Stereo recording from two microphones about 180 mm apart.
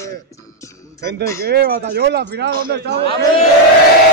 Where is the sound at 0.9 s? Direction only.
65° right (ahead or behind).